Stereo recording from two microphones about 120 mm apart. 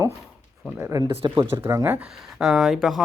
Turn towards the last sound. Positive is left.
turn(degrees=0)  # may be behind; listen again after turning